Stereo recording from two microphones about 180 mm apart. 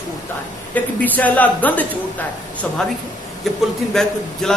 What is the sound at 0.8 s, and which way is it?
Speech, 10° left (ahead or behind).